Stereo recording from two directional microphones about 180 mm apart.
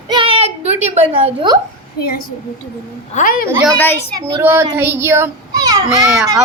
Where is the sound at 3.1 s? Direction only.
55° left (ahead or behind).